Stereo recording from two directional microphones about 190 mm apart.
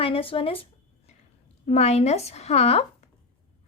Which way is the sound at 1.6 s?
35° left (ahead or behind).